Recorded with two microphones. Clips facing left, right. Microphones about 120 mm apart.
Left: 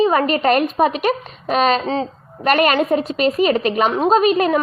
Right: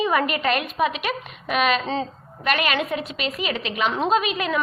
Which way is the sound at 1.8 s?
20° left (ahead or behind).